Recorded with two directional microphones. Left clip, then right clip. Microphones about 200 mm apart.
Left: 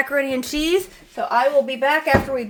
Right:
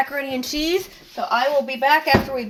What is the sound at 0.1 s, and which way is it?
Speech, 35° left (ahead or behind).